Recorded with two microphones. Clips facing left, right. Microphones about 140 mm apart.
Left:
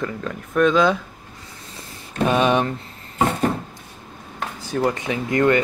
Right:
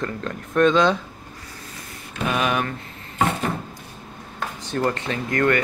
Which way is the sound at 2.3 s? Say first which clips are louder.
Left 4 dB; 30° left (ahead or behind).